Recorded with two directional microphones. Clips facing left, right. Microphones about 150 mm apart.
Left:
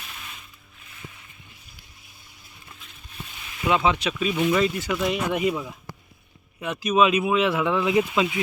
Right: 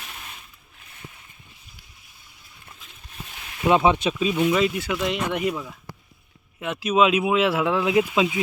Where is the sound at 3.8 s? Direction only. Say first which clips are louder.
Right 3 dB; 25° right (ahead or behind).